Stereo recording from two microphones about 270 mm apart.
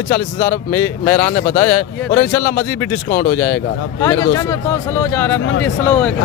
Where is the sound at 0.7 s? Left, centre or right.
Centre.